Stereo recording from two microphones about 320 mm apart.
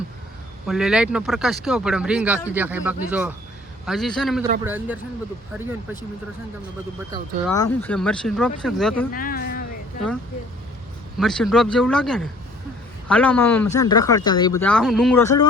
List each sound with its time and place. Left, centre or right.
0.7 s speech: centre
7.4 s speech: centre
9.1 s a sound: left
11.2 s speech: centre